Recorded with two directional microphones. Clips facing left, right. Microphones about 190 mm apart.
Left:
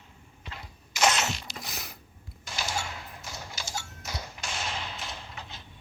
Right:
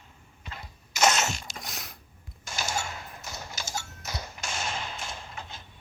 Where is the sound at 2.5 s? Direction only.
45° right (ahead or behind).